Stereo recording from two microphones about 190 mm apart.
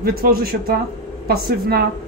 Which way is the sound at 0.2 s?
50° right (ahead or behind).